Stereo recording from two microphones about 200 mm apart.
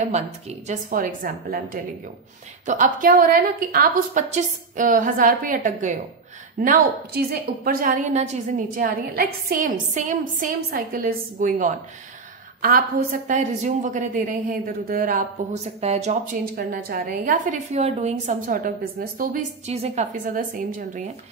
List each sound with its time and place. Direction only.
0.0 s a woman's voice: 35° right (ahead or behind)